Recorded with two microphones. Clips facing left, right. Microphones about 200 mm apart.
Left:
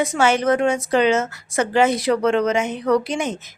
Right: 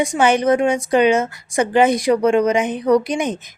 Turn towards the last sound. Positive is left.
turn(degrees=-15)  # may be behind; listen again after turning